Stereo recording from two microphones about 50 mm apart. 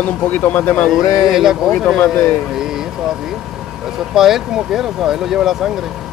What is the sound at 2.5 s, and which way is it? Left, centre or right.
Vehicle, centre.